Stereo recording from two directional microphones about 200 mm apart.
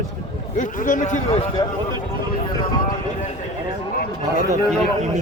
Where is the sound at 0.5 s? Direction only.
40° left (ahead or behind).